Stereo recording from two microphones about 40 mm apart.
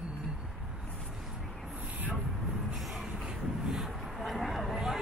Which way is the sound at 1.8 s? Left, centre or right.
Right.